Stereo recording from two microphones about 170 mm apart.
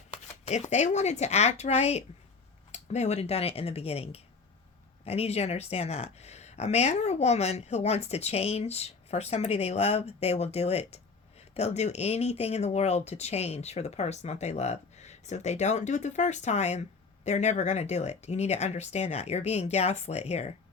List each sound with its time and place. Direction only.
0.4 s speech: 40° left (ahead or behind)